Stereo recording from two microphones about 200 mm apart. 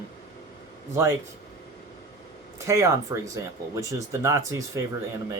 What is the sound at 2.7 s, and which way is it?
Speech, 15° right (ahead or behind).